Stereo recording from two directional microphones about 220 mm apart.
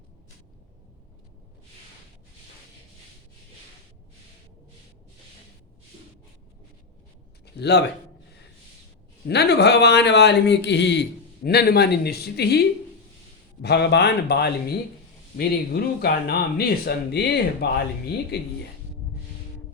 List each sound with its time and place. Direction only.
7.6 s speech: 50° left (ahead or behind)
9.2 s speech: 50° left (ahead or behind)